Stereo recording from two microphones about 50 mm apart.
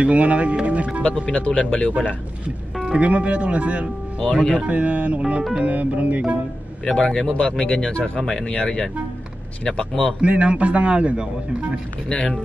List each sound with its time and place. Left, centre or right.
0.0 s a man's voice: right
1.0 s speech: left
2.4 s a man's voice: right
4.2 s speech: left
4.6 s a man's voice: right
6.8 s speech: centre
10.2 s a man's voice: right
12.1 s speech: centre